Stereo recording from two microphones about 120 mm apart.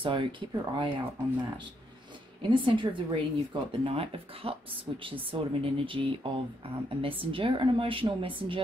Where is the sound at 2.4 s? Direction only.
40° right (ahead or behind).